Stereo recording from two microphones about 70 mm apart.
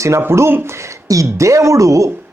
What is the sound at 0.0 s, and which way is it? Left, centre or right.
Speech, right.